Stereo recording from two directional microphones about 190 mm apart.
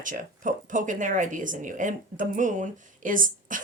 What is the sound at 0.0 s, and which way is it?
Speech, 45° right (ahead or behind).